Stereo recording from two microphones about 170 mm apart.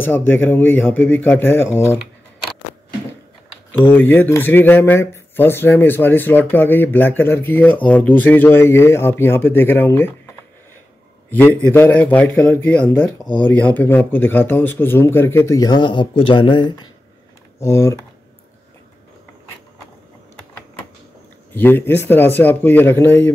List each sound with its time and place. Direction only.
0.0 s speech: 10° left (ahead or behind)
3.9 s speech: 10° left (ahead or behind)
11.3 s speech: 10° left (ahead or behind)
21.5 s speech: 10° left (ahead or behind)